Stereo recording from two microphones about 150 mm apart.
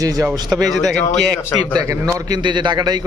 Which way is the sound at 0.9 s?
5° left (ahead or behind).